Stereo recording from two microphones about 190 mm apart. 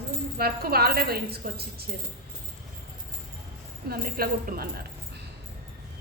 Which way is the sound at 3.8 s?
50° right (ahead or behind).